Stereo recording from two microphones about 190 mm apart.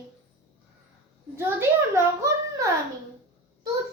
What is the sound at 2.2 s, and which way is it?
Speech, 15° right (ahead or behind).